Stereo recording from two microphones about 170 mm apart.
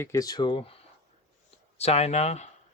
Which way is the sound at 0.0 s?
20° left (ahead or behind).